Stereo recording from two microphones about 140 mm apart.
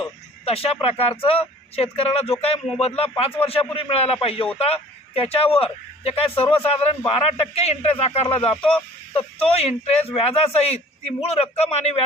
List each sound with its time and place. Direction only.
0.4 s a man's voice: 45° left (ahead or behind)